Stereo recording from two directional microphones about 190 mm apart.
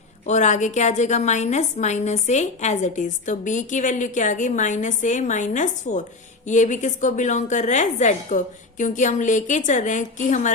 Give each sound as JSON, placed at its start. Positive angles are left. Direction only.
{"t": 0.3, "sound": "a woman's voice", "side_deg": 40}